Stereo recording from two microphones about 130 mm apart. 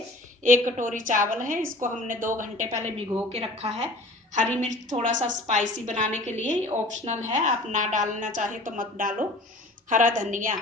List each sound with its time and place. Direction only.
0.4 s a woman's voice: 75° right (ahead or behind)
3.3 s speech: 50° right (ahead or behind)
4.4 s a woman's voice: 70° right (ahead or behind); by 9.1 s 90° right
9.9 s a woman's voice: 80° right